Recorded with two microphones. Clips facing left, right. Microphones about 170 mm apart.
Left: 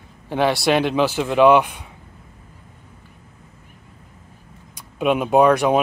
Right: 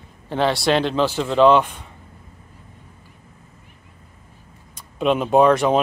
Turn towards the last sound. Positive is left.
turn(degrees=10)  # may be behind; listen again after turning